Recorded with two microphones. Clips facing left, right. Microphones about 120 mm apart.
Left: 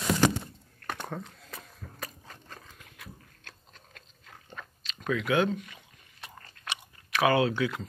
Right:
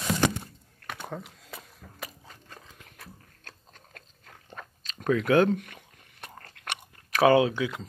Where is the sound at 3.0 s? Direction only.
40° right (ahead or behind).